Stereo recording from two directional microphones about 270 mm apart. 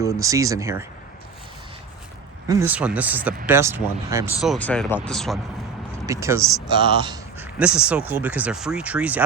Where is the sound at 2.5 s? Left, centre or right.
Centre.